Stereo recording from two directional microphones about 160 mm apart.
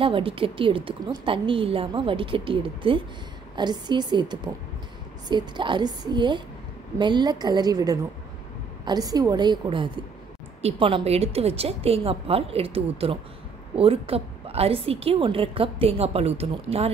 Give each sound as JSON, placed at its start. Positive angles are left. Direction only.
{"t": 0.0, "sound": "a woman's voice", "side_deg": -35}